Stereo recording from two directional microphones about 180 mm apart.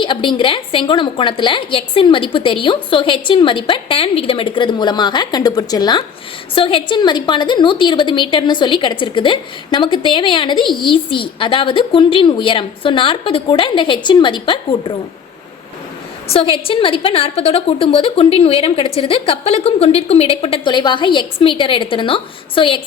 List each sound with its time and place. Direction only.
0.0 s a woman's voice: 25° left (ahead or behind)
16.3 s a woman's voice: 30° left (ahead or behind)